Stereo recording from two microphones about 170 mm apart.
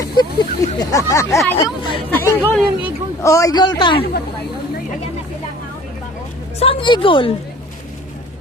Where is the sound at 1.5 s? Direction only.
30° left (ahead or behind).